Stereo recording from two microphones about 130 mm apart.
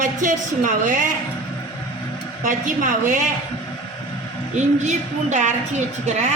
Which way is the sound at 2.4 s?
90° right.